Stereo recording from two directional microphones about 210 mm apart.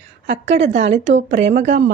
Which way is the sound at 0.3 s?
30° right (ahead or behind).